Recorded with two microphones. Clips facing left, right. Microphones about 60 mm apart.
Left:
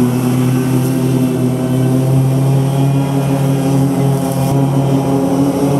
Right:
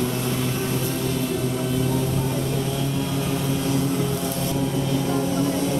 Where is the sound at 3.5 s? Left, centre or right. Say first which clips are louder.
Left 8 dB; left.